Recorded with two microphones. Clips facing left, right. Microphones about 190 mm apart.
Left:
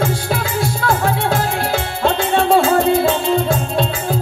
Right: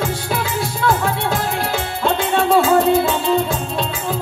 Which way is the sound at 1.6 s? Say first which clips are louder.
Left 2 dB; 30° left (ahead or behind).